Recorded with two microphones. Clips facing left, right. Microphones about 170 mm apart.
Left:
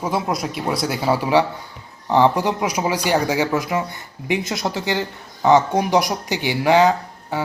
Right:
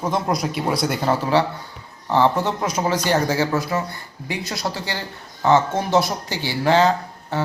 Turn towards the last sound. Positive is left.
turn(degrees=15)  # may be behind; listen again after turning